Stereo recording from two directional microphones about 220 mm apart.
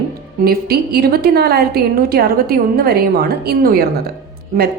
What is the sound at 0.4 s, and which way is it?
A woman's voice, 45° right (ahead or behind).